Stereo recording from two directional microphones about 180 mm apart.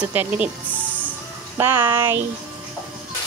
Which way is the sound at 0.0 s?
10° right (ahead or behind).